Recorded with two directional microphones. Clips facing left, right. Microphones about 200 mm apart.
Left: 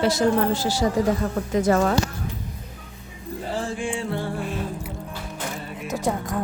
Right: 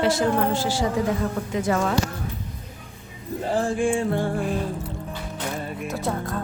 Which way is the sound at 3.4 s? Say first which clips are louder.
Right 6 dB; 50° right (ahead or behind).